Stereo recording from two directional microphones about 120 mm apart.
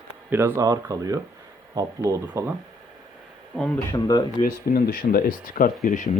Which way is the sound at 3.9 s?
30° left (ahead or behind).